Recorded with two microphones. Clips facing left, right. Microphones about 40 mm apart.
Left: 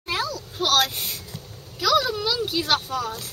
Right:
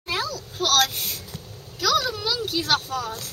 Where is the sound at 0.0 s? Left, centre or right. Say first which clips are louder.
Left 1 dB; centre.